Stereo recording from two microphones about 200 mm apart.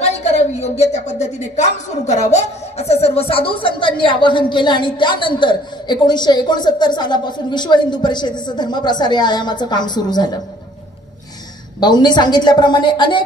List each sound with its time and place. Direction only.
0.0 s a woman's voice: 30° left (ahead or behind)
11.8 s a woman's voice: 20° left (ahead or behind)